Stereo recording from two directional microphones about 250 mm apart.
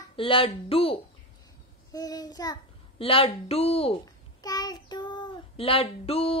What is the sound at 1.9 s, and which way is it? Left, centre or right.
Speech, centre.